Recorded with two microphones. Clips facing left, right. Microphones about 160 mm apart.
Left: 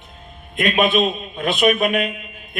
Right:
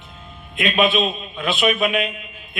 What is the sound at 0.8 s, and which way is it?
A man's voice, 50° left (ahead or behind).